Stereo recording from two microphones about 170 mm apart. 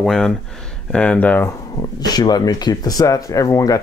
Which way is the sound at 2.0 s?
25° left (ahead or behind).